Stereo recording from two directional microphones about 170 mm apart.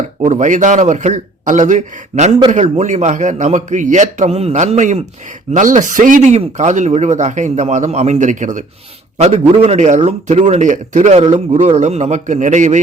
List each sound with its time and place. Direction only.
0.2 s a man's voice: 45° right (ahead or behind)